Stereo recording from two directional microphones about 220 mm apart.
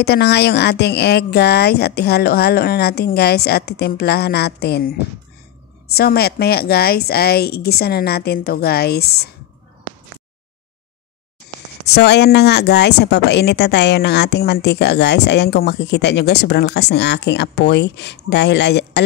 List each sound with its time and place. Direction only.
0.0 s speech: 45° left (ahead or behind)
5.9 s speech: 45° left (ahead or behind)
11.9 s speech: 50° left (ahead or behind)